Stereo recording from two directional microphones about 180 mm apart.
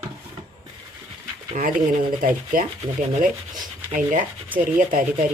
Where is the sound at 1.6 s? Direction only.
45° right (ahead or behind).